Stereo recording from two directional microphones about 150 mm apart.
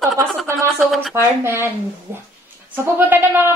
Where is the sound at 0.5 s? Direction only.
Centre (ahead or behind).